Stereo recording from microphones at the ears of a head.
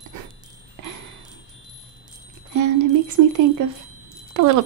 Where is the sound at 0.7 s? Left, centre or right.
Right.